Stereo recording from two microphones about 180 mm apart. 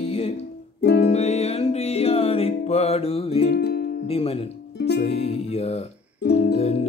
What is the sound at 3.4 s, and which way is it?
Music, 65° left (ahead or behind).